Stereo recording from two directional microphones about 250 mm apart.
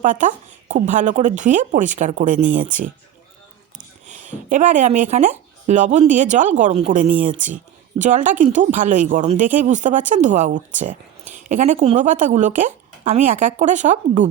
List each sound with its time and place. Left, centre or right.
0.0 s speech: right
4.0 s speech: right